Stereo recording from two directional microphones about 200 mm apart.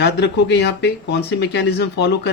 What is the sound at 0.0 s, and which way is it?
Speech, 55° left (ahead or behind).